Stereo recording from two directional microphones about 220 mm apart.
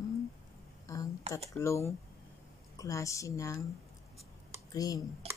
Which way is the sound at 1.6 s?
15° left (ahead or behind).